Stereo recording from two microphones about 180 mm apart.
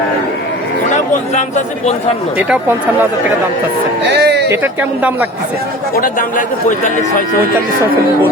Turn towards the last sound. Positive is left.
turn(degrees=45)  # may be behind; listen again after turning